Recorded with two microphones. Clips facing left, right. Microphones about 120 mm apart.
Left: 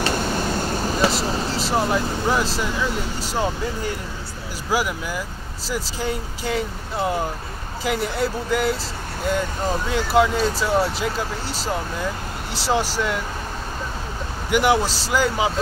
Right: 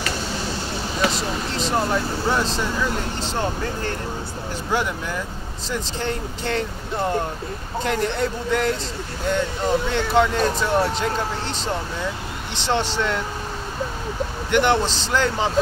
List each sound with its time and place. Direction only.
0.1 s vehicle: 50° left (ahead or behind)
1.1 s a man's voice: 5° left (ahead or behind)
14.5 s a man's voice: 5° left (ahead or behind)